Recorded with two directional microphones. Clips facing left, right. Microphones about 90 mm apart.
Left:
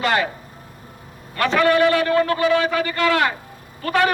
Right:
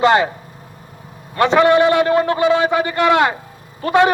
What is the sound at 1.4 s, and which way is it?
A man's voice, 20° right (ahead or behind).